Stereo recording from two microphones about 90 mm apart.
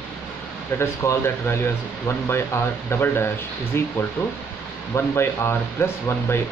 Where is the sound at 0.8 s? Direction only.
25° left (ahead or behind).